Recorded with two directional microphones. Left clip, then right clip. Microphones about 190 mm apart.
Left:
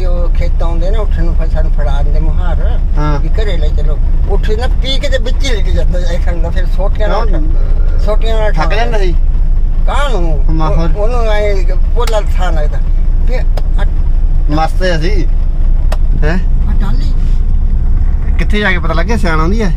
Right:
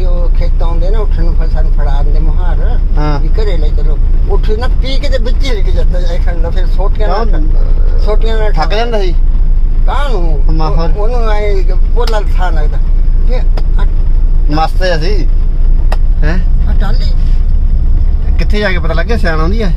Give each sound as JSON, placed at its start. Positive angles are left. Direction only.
{"t": 0.4, "sound": "a sound", "side_deg": 0}
{"t": 3.0, "sound": "a sound", "side_deg": -10}
{"t": 3.3, "sound": "speech", "side_deg": 0}
{"t": 8.5, "sound": "speech", "side_deg": -20}
{"t": 9.8, "sound": "speech", "side_deg": 5}
{"t": 10.5, "sound": "speech", "side_deg": -15}
{"t": 11.0, "sound": "speech", "side_deg": 5}
{"t": 14.8, "sound": "speech", "side_deg": -15}
{"t": 15.9, "sound": "vehicle", "side_deg": 15}
{"t": 18.4, "sound": "speech", "side_deg": 0}
{"t": 18.9, "sound": "speech", "side_deg": 10}